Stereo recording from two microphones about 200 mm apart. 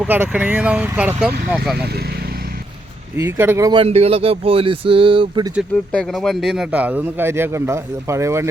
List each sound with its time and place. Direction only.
0.0 s speech: 10° right (ahead or behind)
3.2 s speech: 10° right (ahead or behind)
3.7 s speech: 25° right (ahead or behind)
5.5 s speech: centre (ahead or behind); by 8.4 s 15° right (ahead or behind)